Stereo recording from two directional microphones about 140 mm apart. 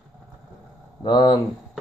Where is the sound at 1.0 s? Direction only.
35° left (ahead or behind).